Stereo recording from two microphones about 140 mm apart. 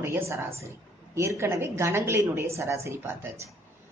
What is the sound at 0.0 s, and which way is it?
A woman's voice, 15° right (ahead or behind).